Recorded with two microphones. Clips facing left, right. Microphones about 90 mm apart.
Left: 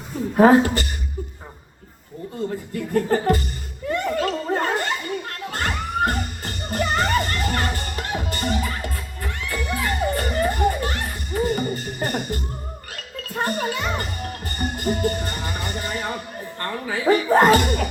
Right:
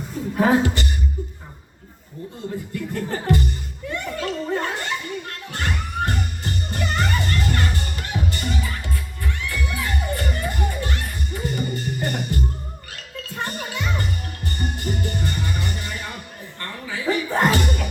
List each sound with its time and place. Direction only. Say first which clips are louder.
0.3 s speech: left 5 dB; 40° left (ahead or behind)
2.7 s speech: left 8 dB; 40° left (ahead or behind)
3.8 s chuckle: left 5 dB; 40° left (ahead or behind)
5.5 s music: left 3 dB; 45° left (ahead or behind)